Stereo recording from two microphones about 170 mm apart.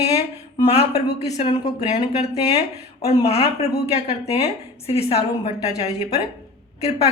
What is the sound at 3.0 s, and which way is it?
A woman's voice, 40° left (ahead or behind).